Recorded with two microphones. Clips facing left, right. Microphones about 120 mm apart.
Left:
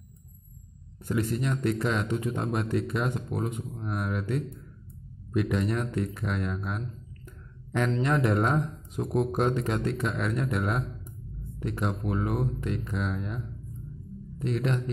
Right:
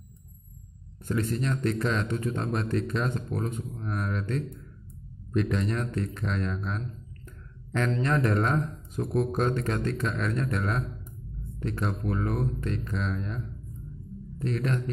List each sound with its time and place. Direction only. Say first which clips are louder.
1.0 s speech: even; 15° left (ahead or behind)